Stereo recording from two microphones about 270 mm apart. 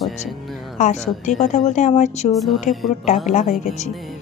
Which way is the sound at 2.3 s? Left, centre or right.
Centre.